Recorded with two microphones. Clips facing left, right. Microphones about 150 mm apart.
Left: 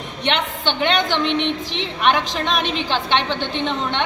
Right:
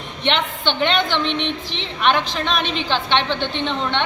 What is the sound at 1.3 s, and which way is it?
Speech, 50° left (ahead or behind).